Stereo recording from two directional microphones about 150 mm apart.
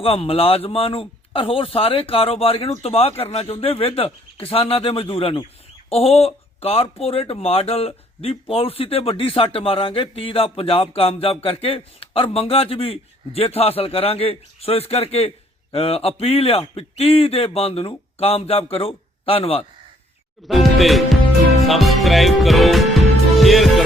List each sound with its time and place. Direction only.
0.0 s speech: 40° left (ahead or behind)
20.5 s music: centre (ahead or behind)